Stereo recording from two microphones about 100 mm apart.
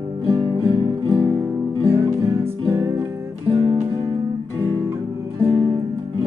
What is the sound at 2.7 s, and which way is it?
Music, 25° right (ahead or behind).